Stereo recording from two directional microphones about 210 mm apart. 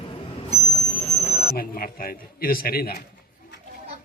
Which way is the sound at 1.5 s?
45° left (ahead or behind).